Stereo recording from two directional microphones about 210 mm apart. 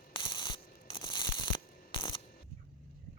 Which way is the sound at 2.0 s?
25° left (ahead or behind).